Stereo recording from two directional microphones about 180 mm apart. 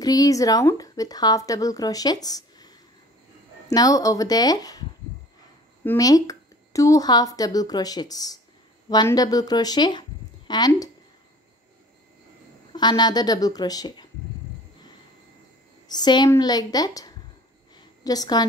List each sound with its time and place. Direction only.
0.0 s speech: 20° left (ahead or behind)
5.9 s speech: 20° left (ahead or behind)
12.7 s speech: 25° left (ahead or behind)
15.9 s speech: 25° left (ahead or behind)
17.7 s a sound: 20° left (ahead or behind)